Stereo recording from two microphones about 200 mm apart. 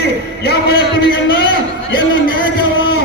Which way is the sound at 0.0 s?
55° left (ahead or behind).